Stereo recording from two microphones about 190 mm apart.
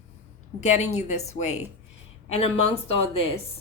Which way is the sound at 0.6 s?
35° left (ahead or behind).